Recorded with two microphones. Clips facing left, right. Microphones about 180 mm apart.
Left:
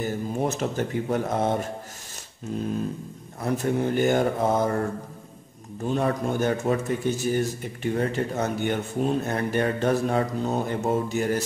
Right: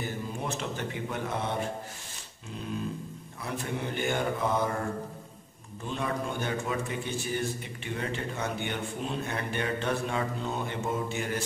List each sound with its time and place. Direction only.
0.0 s speech: 45° left (ahead or behind)
3.3 s speech: 45° left (ahead or behind)
5.9 s a man's voice: 45° left (ahead or behind)